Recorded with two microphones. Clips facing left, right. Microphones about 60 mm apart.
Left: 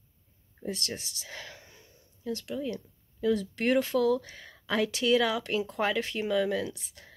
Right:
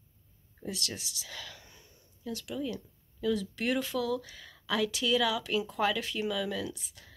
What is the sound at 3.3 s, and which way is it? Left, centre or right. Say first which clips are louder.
Speech: left 5 dB; left.